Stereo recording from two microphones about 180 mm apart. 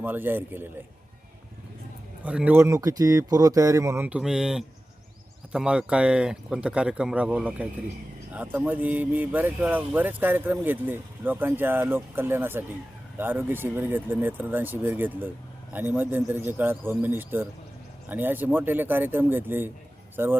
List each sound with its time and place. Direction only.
0.0 s speech: 10° right (ahead or behind)
2.2 s speech: 5° right (ahead or behind)